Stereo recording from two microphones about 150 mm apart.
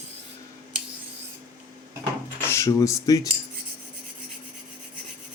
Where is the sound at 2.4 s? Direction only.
20° left (ahead or behind).